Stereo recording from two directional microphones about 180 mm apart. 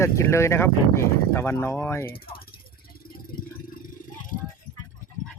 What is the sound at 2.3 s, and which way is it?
Vehicle, 55° left (ahead or behind).